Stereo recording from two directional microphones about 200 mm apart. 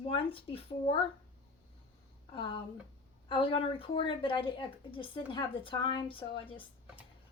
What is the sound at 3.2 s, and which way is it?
A woman's voice, 25° left (ahead or behind).